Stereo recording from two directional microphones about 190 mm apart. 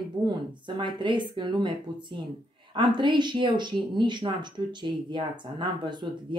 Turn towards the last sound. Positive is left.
turn(degrees=-25)  # may be behind; listen again after turning